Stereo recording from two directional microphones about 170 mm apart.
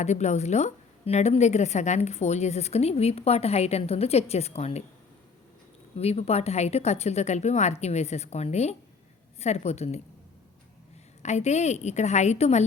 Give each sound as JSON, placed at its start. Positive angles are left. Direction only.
{"t": 0.0, "sound": "a woman's voice", "side_deg": 40}
{"t": 6.0, "sound": "a woman's voice", "side_deg": 35}
{"t": 11.2, "sound": "a woman's voice", "side_deg": 40}